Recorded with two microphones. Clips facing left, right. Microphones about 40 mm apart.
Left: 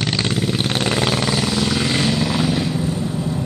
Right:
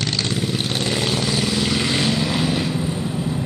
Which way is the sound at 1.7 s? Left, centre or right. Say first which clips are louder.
Left 1 dB; centre.